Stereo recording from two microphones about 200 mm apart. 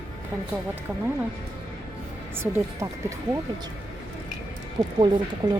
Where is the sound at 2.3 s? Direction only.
10° right (ahead or behind).